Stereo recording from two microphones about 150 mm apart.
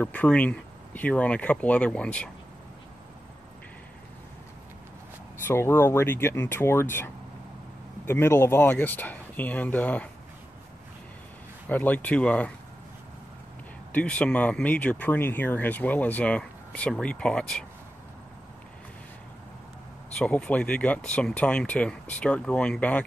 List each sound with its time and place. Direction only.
0.0 s speech: 10° left (ahead or behind)
5.5 s speech: 15° left (ahead or behind)
11.7 s speech: 10° left (ahead or behind)
13.9 s speech: 10° left (ahead or behind)
20.2 s speech: 10° left (ahead or behind)